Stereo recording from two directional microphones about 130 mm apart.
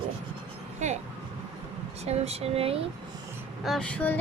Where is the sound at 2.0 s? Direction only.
55° right (ahead or behind).